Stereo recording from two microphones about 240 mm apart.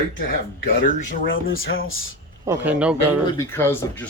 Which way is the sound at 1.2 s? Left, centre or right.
Left.